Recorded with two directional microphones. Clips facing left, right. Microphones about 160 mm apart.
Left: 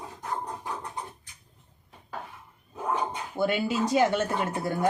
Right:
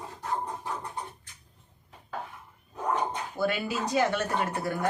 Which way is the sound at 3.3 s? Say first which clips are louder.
Left 4 dB; 25° left (ahead or behind).